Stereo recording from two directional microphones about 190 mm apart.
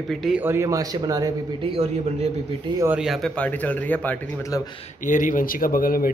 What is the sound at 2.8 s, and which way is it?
Speech, 5° right (ahead or behind).